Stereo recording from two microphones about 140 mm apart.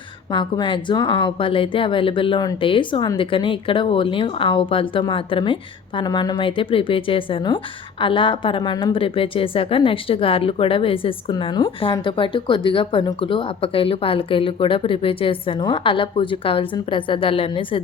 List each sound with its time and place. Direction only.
0.3 s speech: 35° left (ahead or behind)